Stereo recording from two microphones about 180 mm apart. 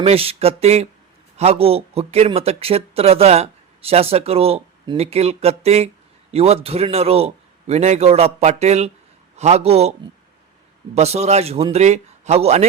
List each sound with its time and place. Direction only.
0.0 s speech: 35° right (ahead or behind)
10.9 s speech: 35° right (ahead or behind)